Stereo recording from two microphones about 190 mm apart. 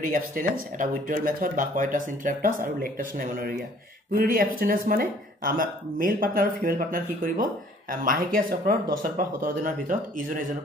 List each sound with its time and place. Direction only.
0.0 s speech: 45° right (ahead or behind)